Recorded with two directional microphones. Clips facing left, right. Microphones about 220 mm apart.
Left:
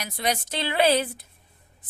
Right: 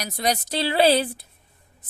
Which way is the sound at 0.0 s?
40° right (ahead or behind).